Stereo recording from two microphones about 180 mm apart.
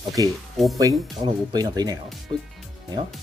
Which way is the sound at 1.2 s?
20° right (ahead or behind).